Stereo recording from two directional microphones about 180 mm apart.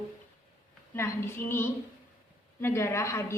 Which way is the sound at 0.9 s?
15° left (ahead or behind).